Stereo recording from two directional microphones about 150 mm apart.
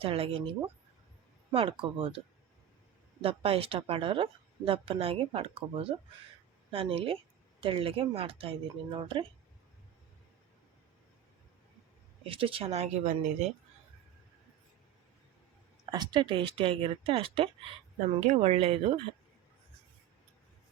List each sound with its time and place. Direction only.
0.0 s speech: 40° right (ahead or behind)
1.5 s speech: 35° right (ahead or behind)
12.2 s speech: 35° right (ahead or behind)
15.9 s speech: 30° right (ahead or behind)